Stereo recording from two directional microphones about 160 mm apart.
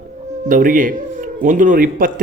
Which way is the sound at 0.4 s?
55° right (ahead or behind).